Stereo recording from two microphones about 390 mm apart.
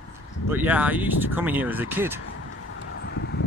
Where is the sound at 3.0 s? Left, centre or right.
Left.